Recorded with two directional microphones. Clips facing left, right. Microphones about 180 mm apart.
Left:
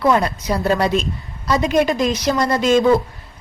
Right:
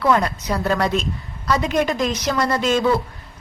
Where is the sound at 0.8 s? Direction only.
10° left (ahead or behind).